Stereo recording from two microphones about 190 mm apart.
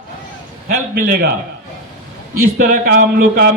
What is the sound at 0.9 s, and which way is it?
Speech, 50° right (ahead or behind).